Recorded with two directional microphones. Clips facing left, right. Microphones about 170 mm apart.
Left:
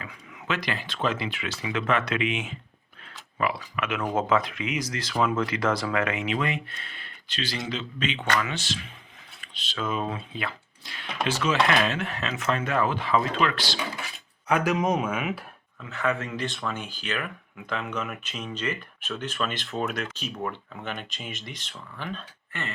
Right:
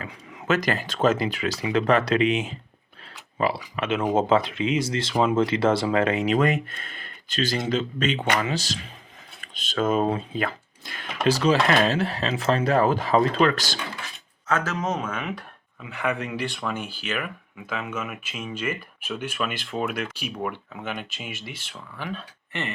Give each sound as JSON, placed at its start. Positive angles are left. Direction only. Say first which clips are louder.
{"t": 0.0, "sound": "speech", "louder": "right 4 dB", "side_deg": -45}
{"t": 11.3, "sound": "speech", "louder": "right 4 dB", "side_deg": -35}
{"t": 14.4, "sound": "speech", "louder": "left 2 dB", "side_deg": 15}
{"t": 15.8, "sound": "speech", "louder": "even", "side_deg": -10}